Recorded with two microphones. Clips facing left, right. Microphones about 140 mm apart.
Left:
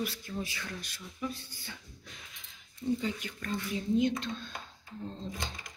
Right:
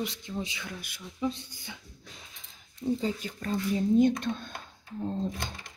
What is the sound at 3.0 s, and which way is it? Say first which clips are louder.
Speech: right 4 dB; 35° right (ahead or behind).